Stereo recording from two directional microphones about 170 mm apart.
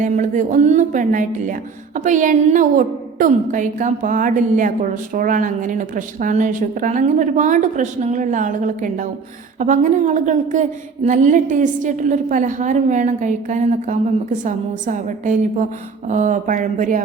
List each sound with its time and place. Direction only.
0.0 s speech: 50° right (ahead or behind)